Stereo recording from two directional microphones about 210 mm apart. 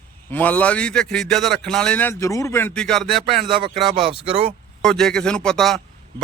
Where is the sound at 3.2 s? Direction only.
25° right (ahead or behind).